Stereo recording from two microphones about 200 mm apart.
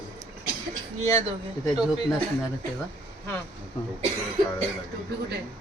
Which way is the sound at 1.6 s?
5° right (ahead or behind).